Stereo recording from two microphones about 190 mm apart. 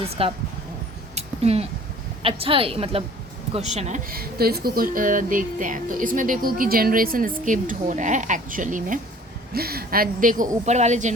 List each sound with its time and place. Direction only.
0.1 s a woman's voice: 30° right (ahead or behind)
1.1 s a sound: 30° right (ahead or behind)
2.2 s a woman's voice: 30° right (ahead or behind)